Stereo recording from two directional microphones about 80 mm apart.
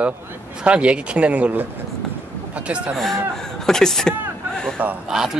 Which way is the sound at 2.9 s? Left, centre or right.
Centre.